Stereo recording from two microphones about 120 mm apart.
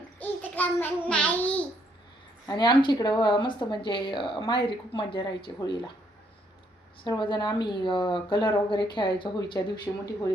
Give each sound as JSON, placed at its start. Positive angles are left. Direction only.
{"t": 0.2, "sound": "babbling", "side_deg": 15}
{"t": 2.5, "sound": "a woman's voice", "side_deg": 40}
{"t": 7.0, "sound": "a woman's voice", "side_deg": 40}
{"t": 9.9, "sound": "speech", "side_deg": 20}